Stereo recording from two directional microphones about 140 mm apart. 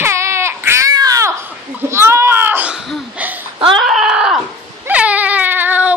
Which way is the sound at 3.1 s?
10° right (ahead or behind).